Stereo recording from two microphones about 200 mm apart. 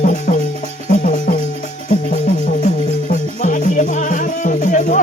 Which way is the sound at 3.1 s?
40° left (ahead or behind).